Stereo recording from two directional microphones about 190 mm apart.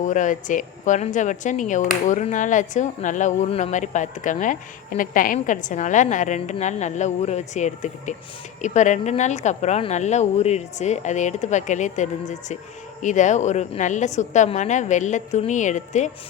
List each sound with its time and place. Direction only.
0.0 s speech: 40° left (ahead or behind)